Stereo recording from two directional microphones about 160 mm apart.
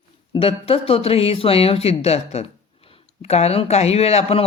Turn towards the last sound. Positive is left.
turn(degrees=40)  # may be behind; listen again after turning